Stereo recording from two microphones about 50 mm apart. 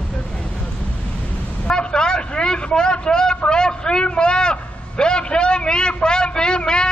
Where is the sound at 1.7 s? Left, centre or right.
Centre.